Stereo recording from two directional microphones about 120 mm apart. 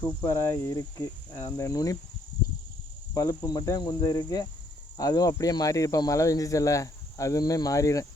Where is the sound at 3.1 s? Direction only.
30° left (ahead or behind).